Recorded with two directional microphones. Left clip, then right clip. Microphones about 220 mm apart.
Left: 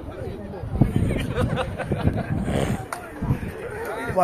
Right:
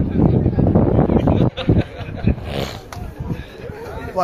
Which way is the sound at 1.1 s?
30° left (ahead or behind).